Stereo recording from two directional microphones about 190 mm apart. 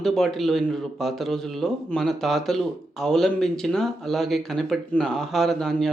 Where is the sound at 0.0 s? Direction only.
Centre (ahead or behind).